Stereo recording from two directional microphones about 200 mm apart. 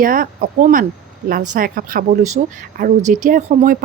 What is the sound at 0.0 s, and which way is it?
Speech, 45° right (ahead or behind).